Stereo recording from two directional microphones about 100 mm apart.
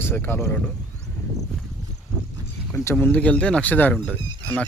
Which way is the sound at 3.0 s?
15° left (ahead or behind).